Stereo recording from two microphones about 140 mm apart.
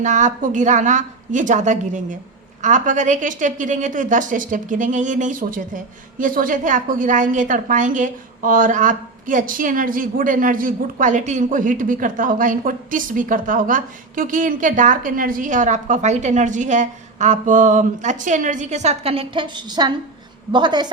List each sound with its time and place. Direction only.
0.0 s a woman's voice: 60° right (ahead or behind); by 20.9 s 30° right (ahead or behind)